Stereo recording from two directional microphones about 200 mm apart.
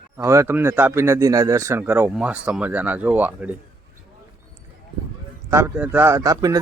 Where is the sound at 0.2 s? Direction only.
15° right (ahead or behind).